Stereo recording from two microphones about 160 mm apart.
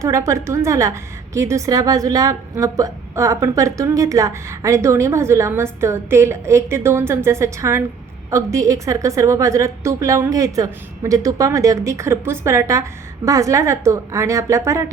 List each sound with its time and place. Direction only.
0.0 s a woman's voice: 20° right (ahead or behind)